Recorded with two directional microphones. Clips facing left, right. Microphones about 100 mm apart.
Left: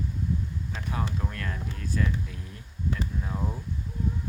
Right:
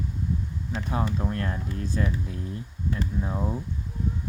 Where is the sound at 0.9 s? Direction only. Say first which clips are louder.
Right 5 dB; 30° right (ahead or behind).